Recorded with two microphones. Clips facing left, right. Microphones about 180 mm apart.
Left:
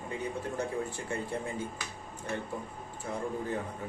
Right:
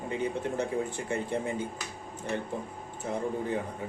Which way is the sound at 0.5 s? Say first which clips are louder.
Right 3 dB; 20° right (ahead or behind).